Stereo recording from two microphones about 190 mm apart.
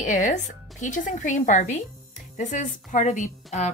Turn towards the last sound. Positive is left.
turn(degrees=40)  # may be behind; listen again after turning